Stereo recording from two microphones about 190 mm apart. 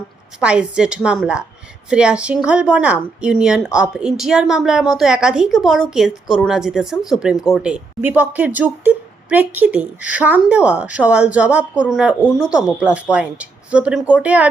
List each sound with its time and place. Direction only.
0.3 s speech: 5° right (ahead or behind)